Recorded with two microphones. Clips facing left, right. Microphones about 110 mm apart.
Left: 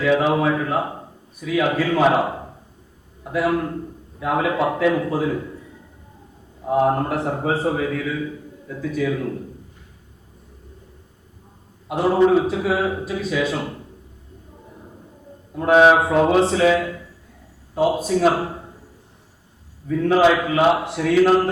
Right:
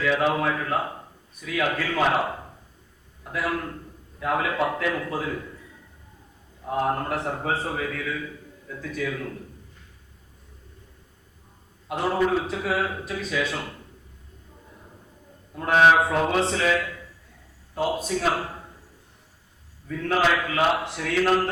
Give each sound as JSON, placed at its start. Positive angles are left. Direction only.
{"t": 0.0, "sound": "a man's voice", "side_deg": 10}
{"t": 2.0, "sound": "a man's voice", "side_deg": 20}
{"t": 3.3, "sound": "a man's voice", "side_deg": 15}
{"t": 6.7, "sound": "a man's voice", "side_deg": 15}
{"t": 9.0, "sound": "a man's voice", "side_deg": 20}
{"t": 11.9, "sound": "a man's voice", "side_deg": 10}
{"t": 15.5, "sound": "a man's voice", "side_deg": 10}
{"t": 17.8, "sound": "speech", "side_deg": 5}
{"t": 18.2, "sound": "a man's voice", "side_deg": 25}
{"t": 19.9, "sound": "a man's voice", "side_deg": 10}